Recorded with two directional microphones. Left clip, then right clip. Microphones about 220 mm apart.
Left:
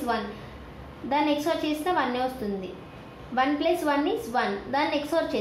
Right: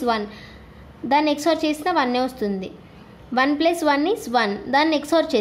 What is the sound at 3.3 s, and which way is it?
A woman's voice, 50° right (ahead or behind).